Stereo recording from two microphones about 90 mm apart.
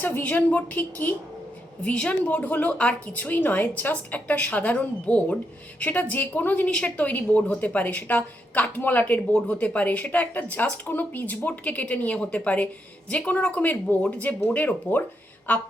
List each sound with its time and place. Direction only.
0.0 s a woman's voice: 20° left (ahead or behind)